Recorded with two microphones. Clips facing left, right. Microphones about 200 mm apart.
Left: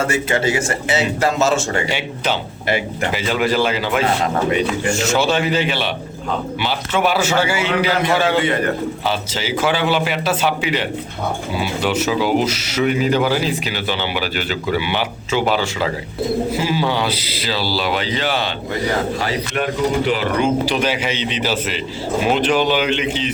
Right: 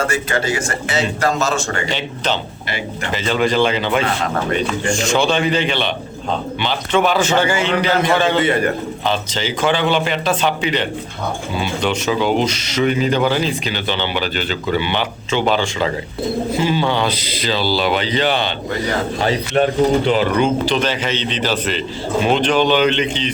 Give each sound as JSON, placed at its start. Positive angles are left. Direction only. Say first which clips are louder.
{"t": 0.0, "sound": "a man's voice", "louder": "left 1 dB", "side_deg": 25}
{"t": 1.5, "sound": "speech", "louder": "left 1 dB", "side_deg": 10}
{"t": 20.4, "sound": "speech", "louder": "right 1 dB", "side_deg": 10}